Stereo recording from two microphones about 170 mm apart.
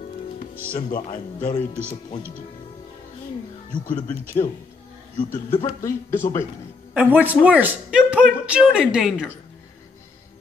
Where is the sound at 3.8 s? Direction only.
10° left (ahead or behind).